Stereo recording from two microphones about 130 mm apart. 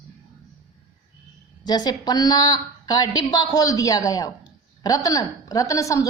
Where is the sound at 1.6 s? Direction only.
30° left (ahead or behind).